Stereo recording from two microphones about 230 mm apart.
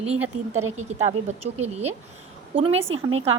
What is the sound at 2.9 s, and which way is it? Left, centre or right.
Speech, right.